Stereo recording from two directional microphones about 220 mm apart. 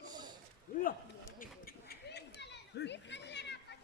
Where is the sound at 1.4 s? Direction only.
40° left (ahead or behind).